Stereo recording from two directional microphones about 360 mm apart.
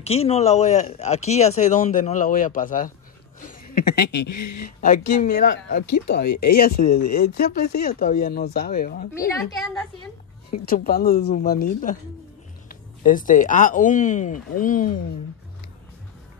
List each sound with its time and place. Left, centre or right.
0.0 s speech: centre
4.3 s speech: left
4.8 s speech: left
6.2 s speech: left
7.2 s speech: left
10.5 s speech: left